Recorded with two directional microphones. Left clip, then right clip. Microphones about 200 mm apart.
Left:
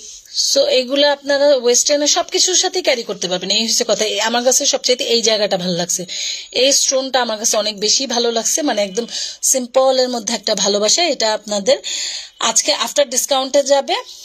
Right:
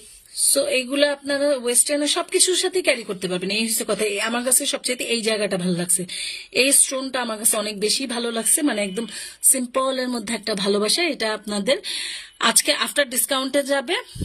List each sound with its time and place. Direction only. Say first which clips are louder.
0.6 s speech: left 5 dB; 15° right (ahead or behind)